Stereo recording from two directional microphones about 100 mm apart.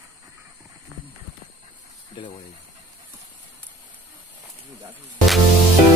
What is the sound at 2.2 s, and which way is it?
Speech, 50° left (ahead or behind).